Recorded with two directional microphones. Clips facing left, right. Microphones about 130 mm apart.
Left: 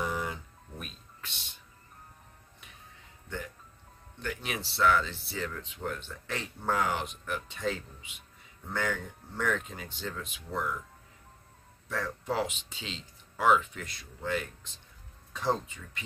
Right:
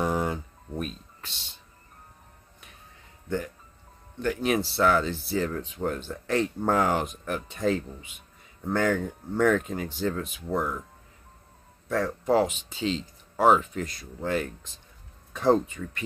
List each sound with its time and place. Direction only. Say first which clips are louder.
0.0 s a sound: right 7 dB; 45° right (ahead or behind)
3.3 s music: right 9 dB; 45° right (ahead or behind)
4.2 s speech: right 11 dB; 45° right (ahead or behind)
11.9 s speech: right 9 dB; 45° right (ahead or behind)
15.3 s speech: right 9 dB; 55° right (ahead or behind)